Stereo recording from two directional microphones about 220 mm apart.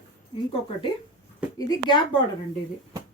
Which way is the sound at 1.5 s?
15° left (ahead or behind).